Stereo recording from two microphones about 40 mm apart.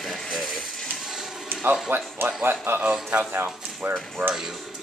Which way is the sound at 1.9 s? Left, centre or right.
Right.